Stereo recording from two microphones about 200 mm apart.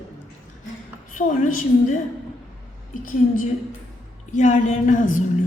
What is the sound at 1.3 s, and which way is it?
Speech, 40° left (ahead or behind).